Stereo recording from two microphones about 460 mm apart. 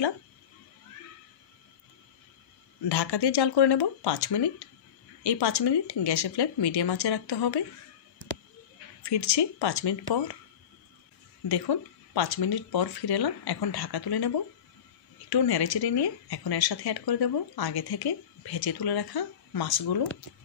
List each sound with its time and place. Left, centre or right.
2.9 s speech: left
9.0 s speech: left
11.4 s speech: left